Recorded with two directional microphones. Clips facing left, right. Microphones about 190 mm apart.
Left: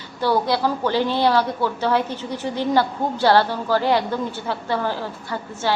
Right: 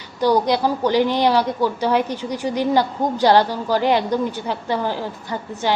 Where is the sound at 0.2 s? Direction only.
15° right (ahead or behind).